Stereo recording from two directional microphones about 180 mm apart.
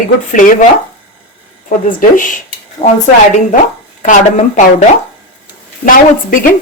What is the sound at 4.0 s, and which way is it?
Speech, 45° left (ahead or behind).